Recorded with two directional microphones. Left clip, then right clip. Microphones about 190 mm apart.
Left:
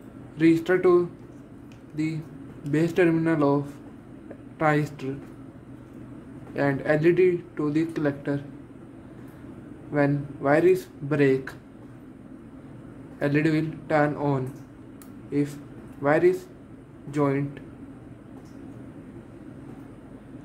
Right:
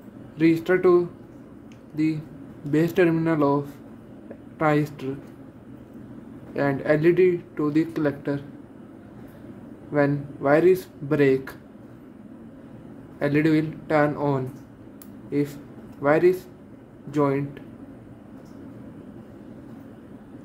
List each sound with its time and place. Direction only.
0.4 s speech: 5° right (ahead or behind)
6.5 s speech: 10° right (ahead or behind)
9.9 s speech: 10° right (ahead or behind)
13.2 s speech: 10° right (ahead or behind)